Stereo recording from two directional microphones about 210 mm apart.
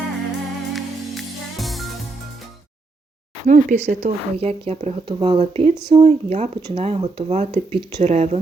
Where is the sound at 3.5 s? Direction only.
35° right (ahead or behind).